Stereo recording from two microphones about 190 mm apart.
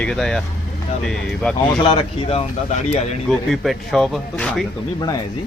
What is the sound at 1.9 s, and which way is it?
Speech, 30° left (ahead or behind).